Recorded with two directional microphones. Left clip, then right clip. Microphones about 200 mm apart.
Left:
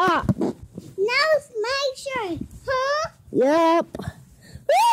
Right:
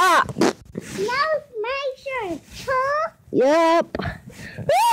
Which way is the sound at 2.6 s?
35° left (ahead or behind).